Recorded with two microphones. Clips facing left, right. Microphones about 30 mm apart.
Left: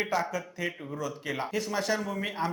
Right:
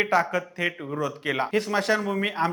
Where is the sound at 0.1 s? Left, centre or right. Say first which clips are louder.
Right 7 dB; right.